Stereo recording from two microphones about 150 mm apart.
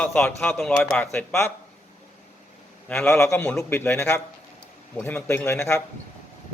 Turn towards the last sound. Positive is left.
turn(degrees=15)  # may be behind; listen again after turning